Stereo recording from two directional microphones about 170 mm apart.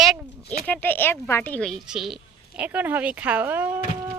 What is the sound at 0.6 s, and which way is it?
Speech, 10° left (ahead or behind).